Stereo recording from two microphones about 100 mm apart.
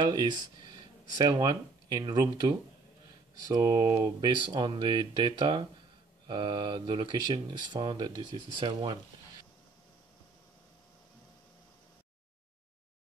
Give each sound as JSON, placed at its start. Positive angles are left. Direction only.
{"t": 0.0, "sound": "speech", "side_deg": -40}